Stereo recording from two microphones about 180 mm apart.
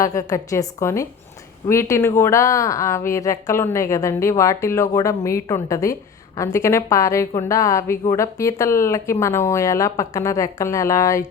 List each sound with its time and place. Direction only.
0.0 s speech: 20° left (ahead or behind)